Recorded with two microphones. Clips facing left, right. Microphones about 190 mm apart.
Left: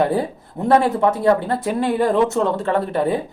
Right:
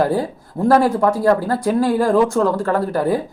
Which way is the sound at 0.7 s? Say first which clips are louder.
Right 1 dB; 20° left (ahead or behind).